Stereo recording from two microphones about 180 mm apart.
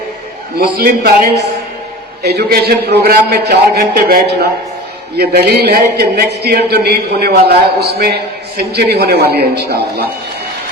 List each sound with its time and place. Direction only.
0.6 s a man's voice: 55° right (ahead or behind)
2.2 s a man's voice: 65° right (ahead or behind)